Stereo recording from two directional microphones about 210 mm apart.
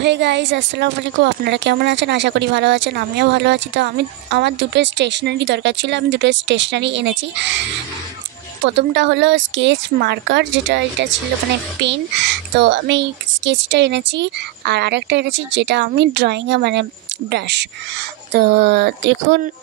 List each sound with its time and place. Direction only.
0.0 s speech: 55° right (ahead or behind)
8.6 s speech: 55° right (ahead or behind)